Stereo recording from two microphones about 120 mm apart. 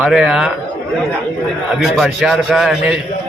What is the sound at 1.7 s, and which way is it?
A man's voice, centre (ahead or behind).